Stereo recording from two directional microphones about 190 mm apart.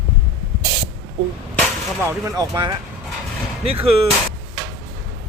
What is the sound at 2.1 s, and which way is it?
Speech, 15° right (ahead or behind).